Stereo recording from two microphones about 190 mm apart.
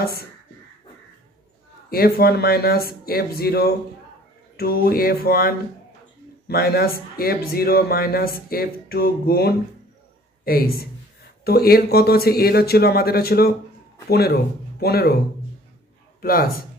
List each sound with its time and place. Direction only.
0.0 s speech: 55° left (ahead or behind)
1.9 s speech: 55° left (ahead or behind)
16.2 s speech: 50° left (ahead or behind)